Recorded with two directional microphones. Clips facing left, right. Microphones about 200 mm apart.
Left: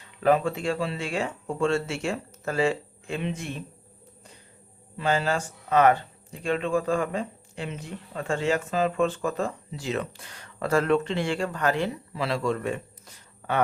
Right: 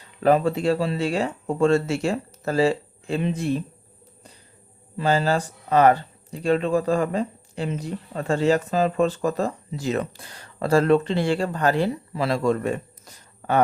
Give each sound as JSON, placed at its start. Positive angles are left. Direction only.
{"t": 0.2, "sound": "speech", "side_deg": -35}
{"t": 4.9, "sound": "speech", "side_deg": -35}